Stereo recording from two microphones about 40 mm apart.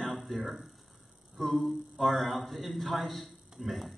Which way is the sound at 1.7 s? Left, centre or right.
Centre.